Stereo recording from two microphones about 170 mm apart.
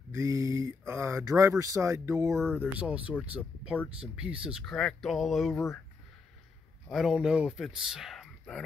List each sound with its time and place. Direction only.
0.1 s speech: 20° right (ahead or behind); by 5.6 s centre (ahead or behind)
6.9 s speech: centre (ahead or behind)